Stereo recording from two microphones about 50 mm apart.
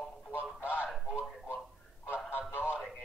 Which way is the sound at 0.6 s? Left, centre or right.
Right.